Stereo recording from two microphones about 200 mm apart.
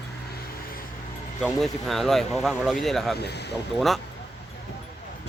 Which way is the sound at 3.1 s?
55° left (ahead or behind).